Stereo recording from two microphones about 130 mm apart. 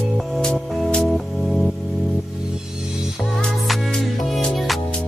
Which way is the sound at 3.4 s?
5° left (ahead or behind).